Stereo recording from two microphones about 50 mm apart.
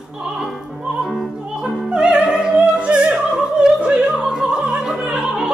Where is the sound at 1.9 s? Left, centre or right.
Centre.